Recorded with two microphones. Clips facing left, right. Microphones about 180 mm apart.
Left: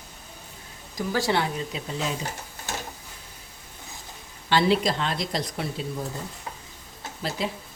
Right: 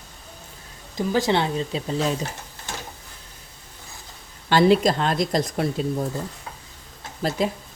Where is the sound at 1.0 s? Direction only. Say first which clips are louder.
Right 4 dB; 20° right (ahead or behind).